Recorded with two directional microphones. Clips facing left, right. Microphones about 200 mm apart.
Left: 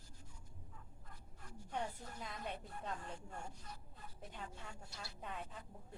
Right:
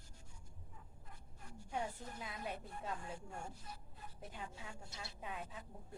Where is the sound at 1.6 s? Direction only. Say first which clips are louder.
Right 1 dB; 5° right (ahead or behind).